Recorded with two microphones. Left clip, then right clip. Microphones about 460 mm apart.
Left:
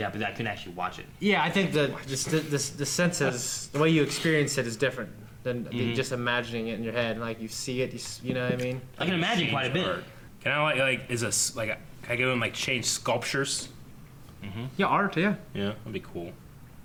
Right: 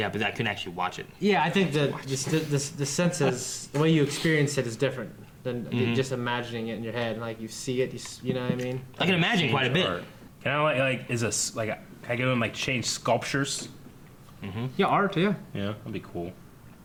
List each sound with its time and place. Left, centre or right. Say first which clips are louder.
0.0 s speech: right 3 dB; centre
1.2 s speech: right 1 dB; right
9.0 s speech: right 3 dB; centre
10.4 s speech: even; right
14.4 s speech: right 4 dB; centre
14.8 s speech: right 1 dB; right